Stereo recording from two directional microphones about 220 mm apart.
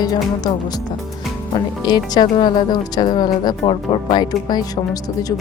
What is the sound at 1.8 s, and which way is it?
Speech, 20° left (ahead or behind).